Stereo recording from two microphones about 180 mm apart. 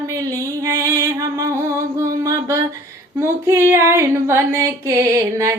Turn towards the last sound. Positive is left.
turn(degrees=-15)  # may be behind; listen again after turning